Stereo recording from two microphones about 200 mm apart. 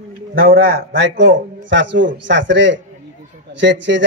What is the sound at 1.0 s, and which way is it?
Speech, 65° right (ahead or behind).